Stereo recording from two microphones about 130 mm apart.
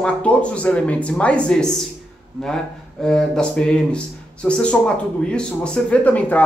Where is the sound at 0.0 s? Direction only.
10° left (ahead or behind).